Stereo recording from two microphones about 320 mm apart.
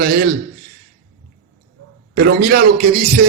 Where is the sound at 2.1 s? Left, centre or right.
Right.